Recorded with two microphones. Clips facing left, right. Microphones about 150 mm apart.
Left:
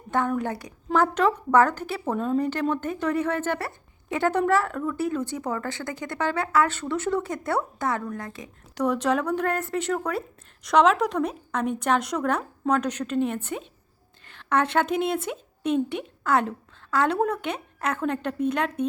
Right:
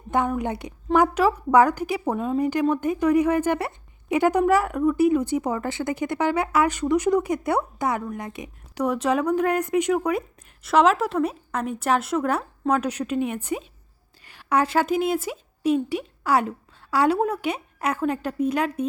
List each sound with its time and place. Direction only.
0.1 s a woman's voice: 15° right (ahead or behind)